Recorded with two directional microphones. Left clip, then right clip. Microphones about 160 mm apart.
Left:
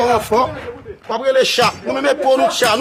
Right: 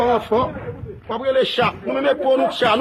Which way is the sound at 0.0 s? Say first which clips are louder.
Left 3 dB; 40° left (ahead or behind).